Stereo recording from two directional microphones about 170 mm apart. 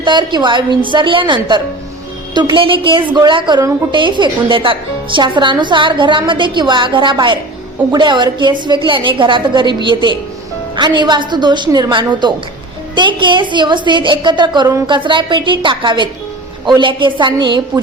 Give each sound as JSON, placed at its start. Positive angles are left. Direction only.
{"t": 0.0, "sound": "a woman's voice", "side_deg": -25}